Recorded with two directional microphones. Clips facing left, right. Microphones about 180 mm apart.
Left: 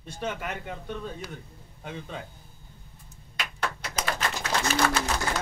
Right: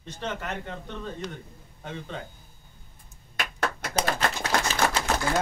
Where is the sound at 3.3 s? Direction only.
50° right (ahead or behind).